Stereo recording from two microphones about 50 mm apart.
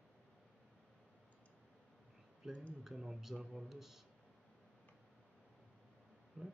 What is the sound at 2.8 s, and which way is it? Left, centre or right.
Speech, centre.